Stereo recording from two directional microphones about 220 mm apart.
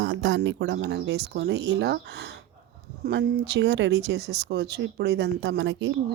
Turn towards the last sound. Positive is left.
turn(degrees=-55)  # may be behind; listen again after turning